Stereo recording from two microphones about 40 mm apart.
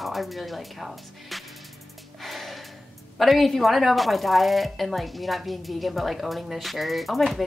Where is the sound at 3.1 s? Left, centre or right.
Centre.